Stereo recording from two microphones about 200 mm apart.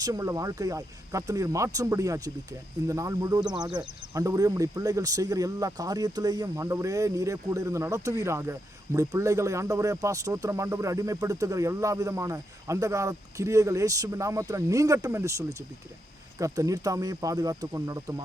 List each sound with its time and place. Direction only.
0.0 s speech: 15° right (ahead or behind)